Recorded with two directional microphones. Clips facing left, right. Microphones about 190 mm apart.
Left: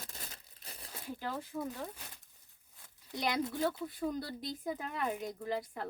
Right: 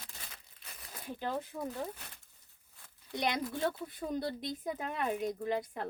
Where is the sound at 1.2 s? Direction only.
20° right (ahead or behind).